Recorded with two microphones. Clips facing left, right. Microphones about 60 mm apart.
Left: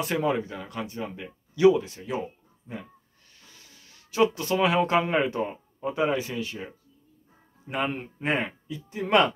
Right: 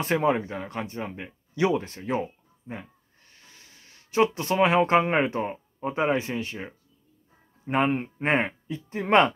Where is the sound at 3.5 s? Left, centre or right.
Right.